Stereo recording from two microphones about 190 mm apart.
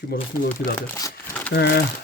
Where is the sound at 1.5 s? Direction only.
60° left (ahead or behind).